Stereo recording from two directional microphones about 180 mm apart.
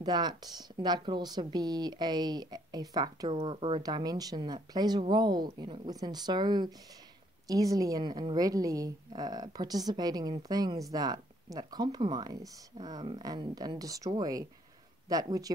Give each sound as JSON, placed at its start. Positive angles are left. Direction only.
{"t": 0.0, "sound": "a woman's voice", "side_deg": -25}